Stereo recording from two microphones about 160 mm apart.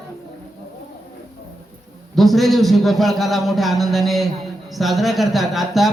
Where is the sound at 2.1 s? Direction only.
Centre (ahead or behind).